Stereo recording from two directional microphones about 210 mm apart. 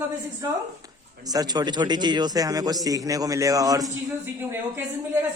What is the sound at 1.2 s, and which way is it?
A man's voice, 20° right (ahead or behind).